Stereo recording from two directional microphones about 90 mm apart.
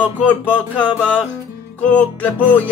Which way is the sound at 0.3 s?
15° left (ahead or behind).